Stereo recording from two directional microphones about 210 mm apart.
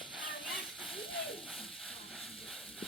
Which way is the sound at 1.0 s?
25° left (ahead or behind).